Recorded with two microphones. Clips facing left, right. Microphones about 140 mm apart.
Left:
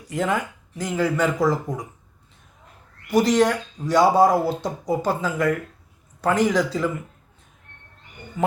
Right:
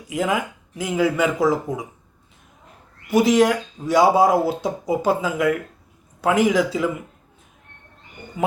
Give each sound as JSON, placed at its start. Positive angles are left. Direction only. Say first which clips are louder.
{"t": 0.1, "sound": "speech", "louder": "right 1 dB", "side_deg": -5}
{"t": 3.1, "sound": "speech", "louder": "right 2 dB", "side_deg": -5}
{"t": 8.4, "sound": "speech", "louder": "even", "side_deg": -15}